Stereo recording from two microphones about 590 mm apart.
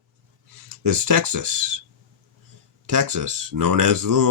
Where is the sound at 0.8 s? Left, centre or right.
Right.